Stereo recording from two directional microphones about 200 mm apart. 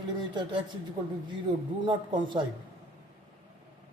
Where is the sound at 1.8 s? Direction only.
25° right (ahead or behind).